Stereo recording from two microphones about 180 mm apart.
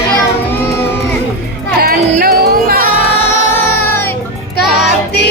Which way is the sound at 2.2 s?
55° right (ahead or behind).